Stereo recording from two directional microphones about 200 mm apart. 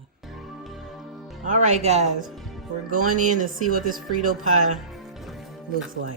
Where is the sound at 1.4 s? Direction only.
35° right (ahead or behind).